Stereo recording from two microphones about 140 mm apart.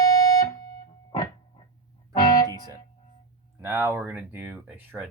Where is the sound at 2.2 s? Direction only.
25° left (ahead or behind).